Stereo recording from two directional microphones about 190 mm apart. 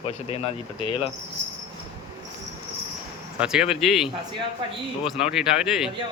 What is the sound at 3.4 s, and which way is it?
Speech, 5° right (ahead or behind).